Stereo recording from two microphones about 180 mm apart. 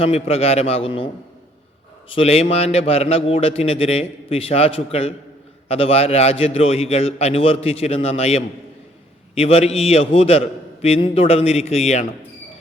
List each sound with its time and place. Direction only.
0.0 s a man's voice: 35° left (ahead or behind)
2.0 s a man's voice: 35° left (ahead or behind)